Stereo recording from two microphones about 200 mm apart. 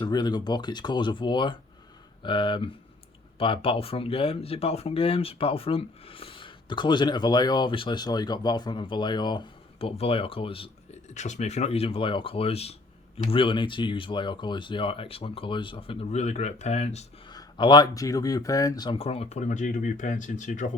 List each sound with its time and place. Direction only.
0.0 s speech: 20° left (ahead or behind)
17.3 s speech: 20° left (ahead or behind); by 20.7 s 40° left (ahead or behind)